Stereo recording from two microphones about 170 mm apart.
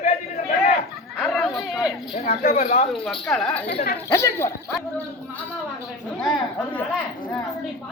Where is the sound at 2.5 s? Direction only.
45° left (ahead or behind).